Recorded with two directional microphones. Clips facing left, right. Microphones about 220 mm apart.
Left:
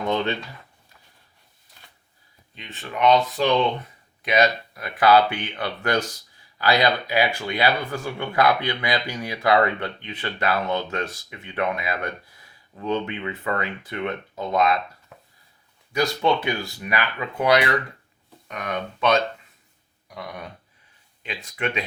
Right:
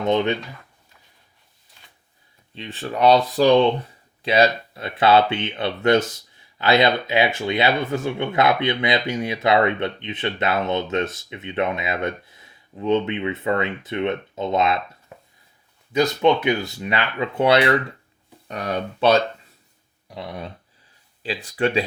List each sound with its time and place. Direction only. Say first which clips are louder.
0.0 s speech: right 4 dB; 20° right (ahead or behind)
2.6 s speech: right 3 dB; 35° right (ahead or behind)
15.9 s speech: right 4 dB; 20° right (ahead or behind)